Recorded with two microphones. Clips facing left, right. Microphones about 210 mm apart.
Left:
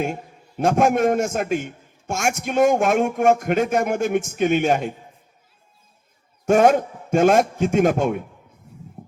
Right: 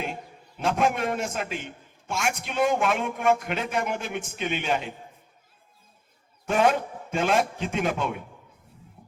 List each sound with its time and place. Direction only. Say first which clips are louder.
0.0 s a man's voice: left 8 dB; 45° left (ahead or behind)
6.4 s a man's voice: left 7 dB; 45° left (ahead or behind)
9.0 s music: left 12 dB; 45° left (ahead or behind)